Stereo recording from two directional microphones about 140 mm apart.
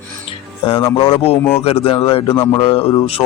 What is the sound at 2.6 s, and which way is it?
Speech, 40° left (ahead or behind).